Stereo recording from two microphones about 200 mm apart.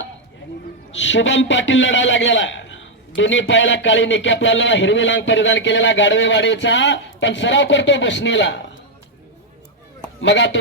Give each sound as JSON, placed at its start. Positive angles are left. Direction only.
{"t": 0.9, "sound": "a man's voice", "side_deg": 65}
{"t": 10.2, "sound": "a man's voice", "side_deg": 65}